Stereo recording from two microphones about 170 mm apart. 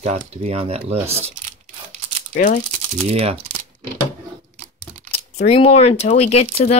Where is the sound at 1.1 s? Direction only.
35° right (ahead or behind).